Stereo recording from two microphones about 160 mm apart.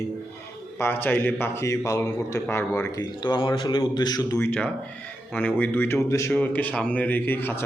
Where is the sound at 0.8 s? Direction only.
15° left (ahead or behind).